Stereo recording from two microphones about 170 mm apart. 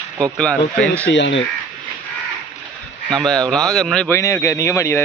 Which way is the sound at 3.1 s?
5° left (ahead or behind).